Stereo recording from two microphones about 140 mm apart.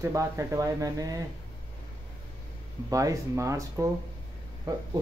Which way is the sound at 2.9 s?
25° right (ahead or behind).